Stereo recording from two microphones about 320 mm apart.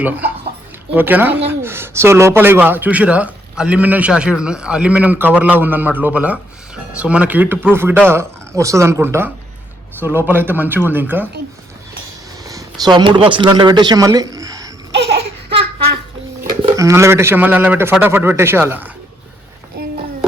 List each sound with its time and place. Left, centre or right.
0.0 s a man's voice: centre
12.5 s speech: centre
16.6 s a man's voice: centre
19.8 s a sound: right